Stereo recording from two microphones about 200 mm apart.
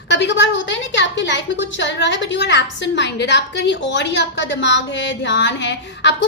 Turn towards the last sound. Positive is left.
turn(degrees=60)  # may be behind; listen again after turning